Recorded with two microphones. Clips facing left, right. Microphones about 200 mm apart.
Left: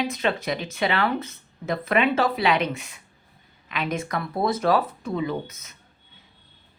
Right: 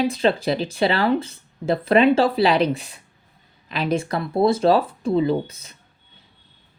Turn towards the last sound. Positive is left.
turn(degrees=-30)  # may be behind; listen again after turning